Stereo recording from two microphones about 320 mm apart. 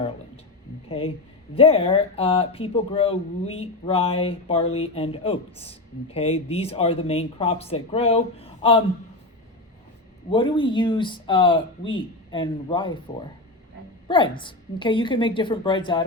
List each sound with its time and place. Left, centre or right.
0.9 s a woman's voice: centre
10.2 s speech: centre
14.1 s speech: centre